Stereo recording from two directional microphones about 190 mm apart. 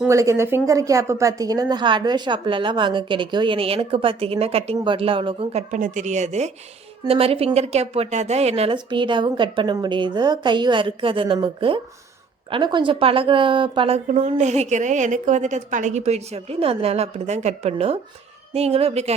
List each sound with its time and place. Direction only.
0.0 s a woman's voice: 15° right (ahead or behind); by 19.1 s 35° right (ahead or behind)